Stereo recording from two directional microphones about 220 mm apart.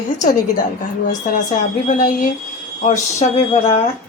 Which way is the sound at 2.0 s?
35° left (ahead or behind).